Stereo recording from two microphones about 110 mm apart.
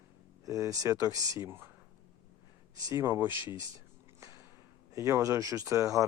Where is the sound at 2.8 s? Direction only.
30° right (ahead or behind).